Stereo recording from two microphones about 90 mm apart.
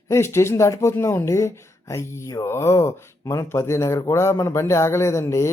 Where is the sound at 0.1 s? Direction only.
30° left (ahead or behind).